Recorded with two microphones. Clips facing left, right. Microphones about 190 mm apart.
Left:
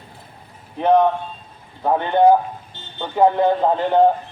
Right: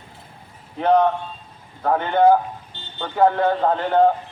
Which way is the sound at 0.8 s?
15° left (ahead or behind).